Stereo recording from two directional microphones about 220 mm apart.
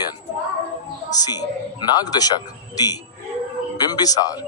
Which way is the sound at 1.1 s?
15° left (ahead or behind).